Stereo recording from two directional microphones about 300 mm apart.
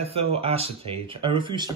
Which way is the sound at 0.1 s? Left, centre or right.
Centre.